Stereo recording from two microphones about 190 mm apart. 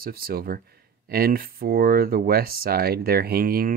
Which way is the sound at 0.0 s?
50° right (ahead or behind).